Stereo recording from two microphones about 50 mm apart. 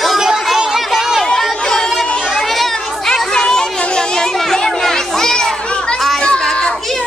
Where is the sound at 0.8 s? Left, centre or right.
Centre.